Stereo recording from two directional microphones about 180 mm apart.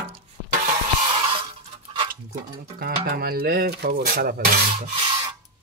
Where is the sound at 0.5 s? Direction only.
50° right (ahead or behind).